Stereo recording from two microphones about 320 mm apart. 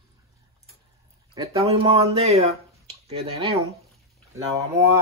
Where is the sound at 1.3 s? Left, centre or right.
Centre.